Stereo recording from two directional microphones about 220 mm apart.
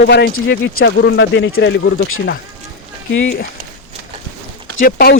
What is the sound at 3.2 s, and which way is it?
Speech, 50° left (ahead or behind).